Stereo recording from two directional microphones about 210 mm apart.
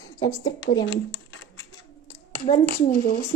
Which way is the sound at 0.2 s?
15° left (ahead or behind).